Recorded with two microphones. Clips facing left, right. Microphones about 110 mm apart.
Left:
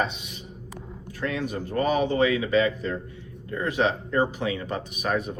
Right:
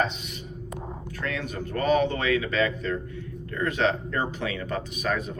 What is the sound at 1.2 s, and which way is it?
A man's voice, 20° left (ahead or behind).